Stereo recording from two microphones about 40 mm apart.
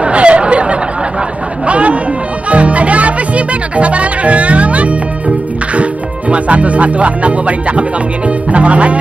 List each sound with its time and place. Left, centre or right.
0.0 s a sound: right
1.7 s chatter: right
2.5 s music: right
5.8 s speech: right
8.5 s music: right